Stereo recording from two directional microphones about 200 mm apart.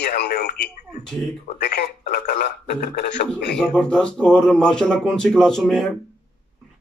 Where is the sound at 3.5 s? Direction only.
5° left (ahead or behind).